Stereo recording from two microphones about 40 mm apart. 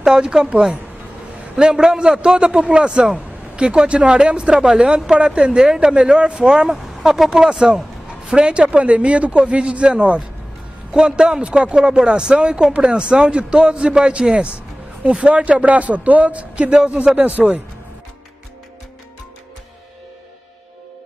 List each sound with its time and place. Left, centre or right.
0.0 s speech: centre
1.6 s speech: centre
6.7 s speech: centre; by 8.6 s right
8.6 s speech: right